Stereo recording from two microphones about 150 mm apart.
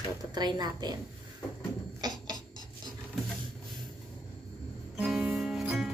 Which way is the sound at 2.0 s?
25° right (ahead or behind).